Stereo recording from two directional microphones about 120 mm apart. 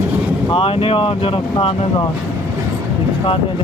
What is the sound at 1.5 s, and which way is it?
Speech, 40° left (ahead or behind).